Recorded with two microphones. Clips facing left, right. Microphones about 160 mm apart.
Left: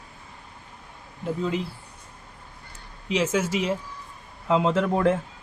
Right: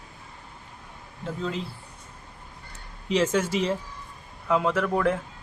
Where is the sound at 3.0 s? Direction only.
5° left (ahead or behind).